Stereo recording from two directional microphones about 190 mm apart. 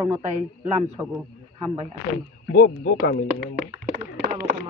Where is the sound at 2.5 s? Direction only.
55° left (ahead or behind).